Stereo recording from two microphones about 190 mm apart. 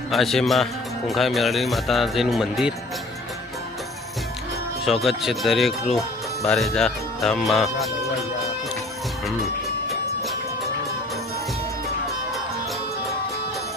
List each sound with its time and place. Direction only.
0.1 s speech: centre (ahead or behind)
4.9 s speech: centre (ahead or behind)